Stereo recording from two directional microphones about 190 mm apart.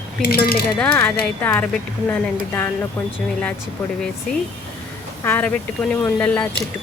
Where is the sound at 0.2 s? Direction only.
50° left (ahead or behind).